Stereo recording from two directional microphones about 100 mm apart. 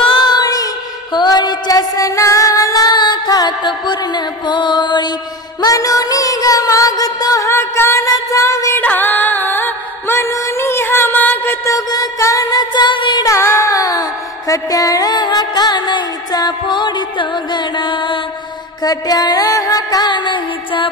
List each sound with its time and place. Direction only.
0.1 s music: 45° left (ahead or behind)
5.6 s music: 35° left (ahead or behind)
8.7 s music: 20° left (ahead or behind)
11.6 s music: 35° left (ahead or behind)
13.2 s music: 30° left (ahead or behind); by 18.2 s 50° left (ahead or behind)
18.8 s music: 40° left (ahead or behind)